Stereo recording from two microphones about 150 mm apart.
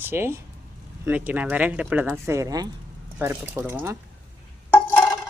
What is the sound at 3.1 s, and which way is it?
Speech, 15° right (ahead or behind).